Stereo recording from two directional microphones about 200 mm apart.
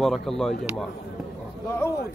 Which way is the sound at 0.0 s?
Centre (ahead or behind).